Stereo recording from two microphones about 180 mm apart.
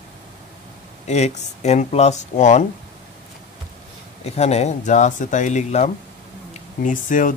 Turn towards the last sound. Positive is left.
turn(degrees=45)  # may be behind; listen again after turning